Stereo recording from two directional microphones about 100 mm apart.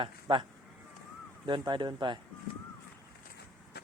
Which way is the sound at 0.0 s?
60° right (ahead or behind).